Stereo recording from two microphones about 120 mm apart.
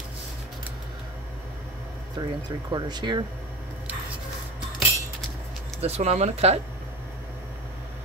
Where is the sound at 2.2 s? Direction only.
35° right (ahead or behind).